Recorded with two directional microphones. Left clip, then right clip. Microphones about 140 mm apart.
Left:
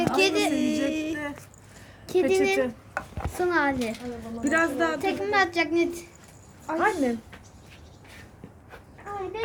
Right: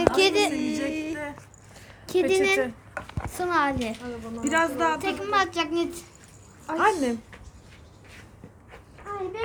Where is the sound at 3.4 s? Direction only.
40° right (ahead or behind).